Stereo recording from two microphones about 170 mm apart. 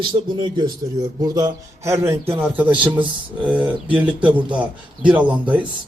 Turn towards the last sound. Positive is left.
turn(degrees=-10)  # may be behind; listen again after turning